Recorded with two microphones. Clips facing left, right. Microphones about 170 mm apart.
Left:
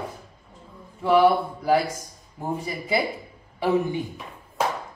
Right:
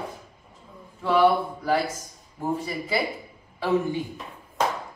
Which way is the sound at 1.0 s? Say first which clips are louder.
Left 2 dB; 10° left (ahead or behind).